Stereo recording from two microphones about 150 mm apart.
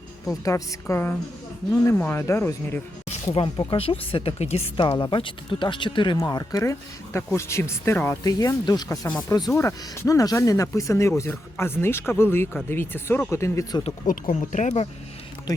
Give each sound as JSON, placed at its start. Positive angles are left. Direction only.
{"t": 0.4, "sound": "speech", "side_deg": 20}
{"t": 3.3, "sound": "speech", "side_deg": 35}
{"t": 4.8, "sound": "speech", "side_deg": 30}
{"t": 14.1, "sound": "speech", "side_deg": 60}
{"t": 15.5, "sound": "speech", "side_deg": 25}